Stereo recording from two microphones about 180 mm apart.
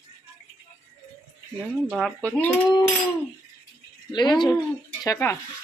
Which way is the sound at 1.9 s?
Centre (ahead or behind).